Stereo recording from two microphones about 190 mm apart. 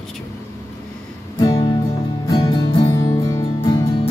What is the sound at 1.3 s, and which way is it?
Music, 20° left (ahead or behind).